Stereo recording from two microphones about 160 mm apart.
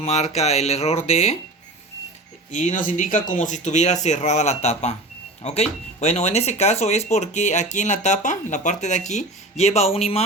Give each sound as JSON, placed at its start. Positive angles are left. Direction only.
{"t": 0.0, "sound": "speech", "side_deg": 45}
{"t": 2.5, "sound": "speech", "side_deg": 50}